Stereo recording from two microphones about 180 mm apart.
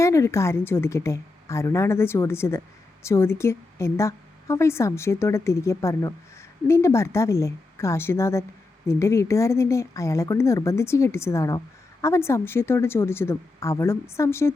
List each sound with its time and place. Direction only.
0.0 s a woman's voice: 15° left (ahead or behind)